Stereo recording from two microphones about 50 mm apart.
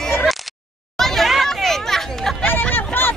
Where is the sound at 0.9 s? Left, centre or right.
Centre.